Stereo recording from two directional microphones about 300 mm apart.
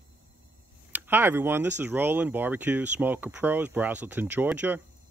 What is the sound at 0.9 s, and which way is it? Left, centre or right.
Speech, centre.